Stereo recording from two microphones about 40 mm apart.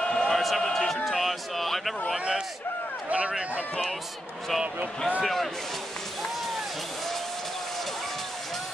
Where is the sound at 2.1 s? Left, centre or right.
Right.